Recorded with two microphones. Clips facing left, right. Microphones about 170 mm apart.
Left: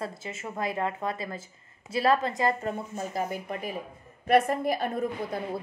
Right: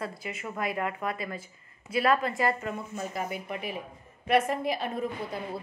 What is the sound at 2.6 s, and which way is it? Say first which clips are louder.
A woman's voice: left 2 dB; 35° left (ahead or behind).